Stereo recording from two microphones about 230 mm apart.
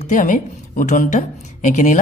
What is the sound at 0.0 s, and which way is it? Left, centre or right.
A man's voice, left.